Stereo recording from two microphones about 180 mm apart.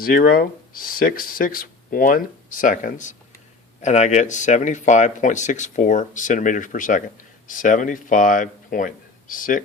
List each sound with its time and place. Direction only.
0.0 s speech: 55° left (ahead or behind)